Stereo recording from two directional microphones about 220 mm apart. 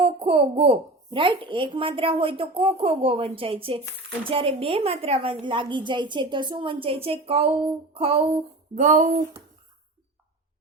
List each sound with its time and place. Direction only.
0.0 s a woman's voice: 25° right (ahead or behind)